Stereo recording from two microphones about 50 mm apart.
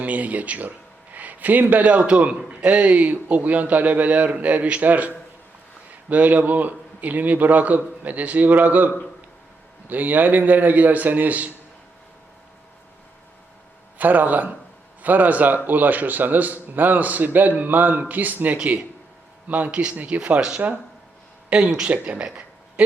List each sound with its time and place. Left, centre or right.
0.0 s a man's voice: right
9.9 s a man's voice: right
14.0 s a man's voice: right